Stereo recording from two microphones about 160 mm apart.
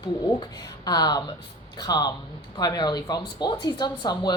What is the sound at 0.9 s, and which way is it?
Speech, 25° left (ahead or behind).